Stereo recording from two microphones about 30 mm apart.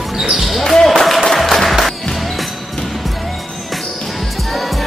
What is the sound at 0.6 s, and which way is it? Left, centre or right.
Basketball bounce, centre.